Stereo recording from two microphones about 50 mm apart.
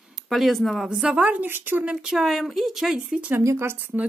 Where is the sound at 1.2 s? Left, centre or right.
Right.